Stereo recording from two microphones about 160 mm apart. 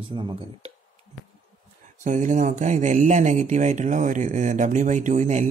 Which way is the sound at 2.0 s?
50° right (ahead or behind).